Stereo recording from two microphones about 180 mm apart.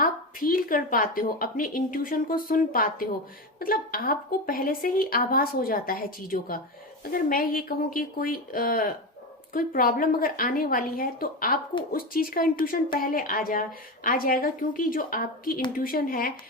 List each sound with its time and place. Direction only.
0.0 s a woman's voice: 55° left (ahead or behind)